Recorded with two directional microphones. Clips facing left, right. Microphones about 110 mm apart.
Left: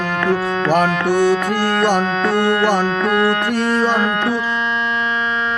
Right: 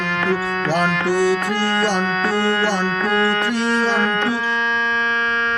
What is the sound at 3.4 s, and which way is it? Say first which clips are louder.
Speech: left 2 dB; 50° left (ahead or behind).